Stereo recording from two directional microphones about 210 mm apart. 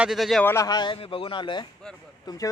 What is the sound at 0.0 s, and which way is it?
Speech, centre (ahead or behind).